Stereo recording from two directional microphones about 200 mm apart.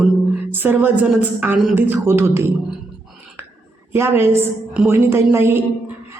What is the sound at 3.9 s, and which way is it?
A woman's voice, 10° right (ahead or behind).